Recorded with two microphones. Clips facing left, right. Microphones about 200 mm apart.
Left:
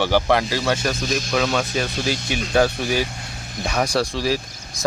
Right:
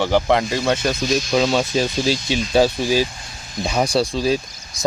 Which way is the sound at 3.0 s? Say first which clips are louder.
Left 3 dB; 60° left (ahead or behind).